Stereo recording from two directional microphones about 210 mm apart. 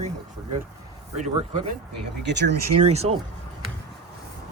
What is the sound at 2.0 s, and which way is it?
Speech, 55° right (ahead or behind).